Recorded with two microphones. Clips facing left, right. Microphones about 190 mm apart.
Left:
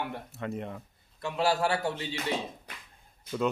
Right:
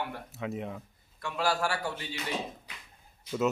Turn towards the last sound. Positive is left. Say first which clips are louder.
# right 1 dB
turn(degrees=-5)  # may be behind; listen again after turning